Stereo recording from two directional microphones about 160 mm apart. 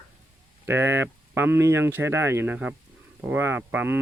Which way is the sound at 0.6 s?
15° right (ahead or behind).